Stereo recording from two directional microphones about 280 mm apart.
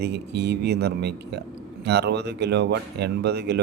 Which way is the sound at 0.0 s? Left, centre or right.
Right.